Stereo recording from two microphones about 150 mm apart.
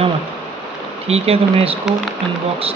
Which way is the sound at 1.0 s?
40° right (ahead or behind).